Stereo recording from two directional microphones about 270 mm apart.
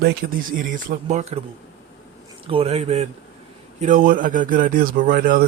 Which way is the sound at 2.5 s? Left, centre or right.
Right.